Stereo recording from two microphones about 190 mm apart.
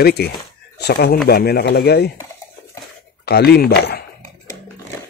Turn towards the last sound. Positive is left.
turn(degrees=60)  # may be behind; listen again after turning